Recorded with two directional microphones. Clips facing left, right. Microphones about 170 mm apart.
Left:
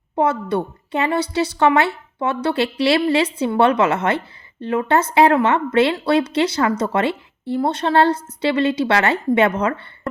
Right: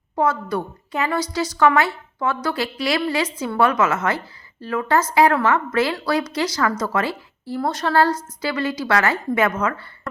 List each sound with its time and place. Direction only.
0.2 s a woman's voice: 25° left (ahead or behind)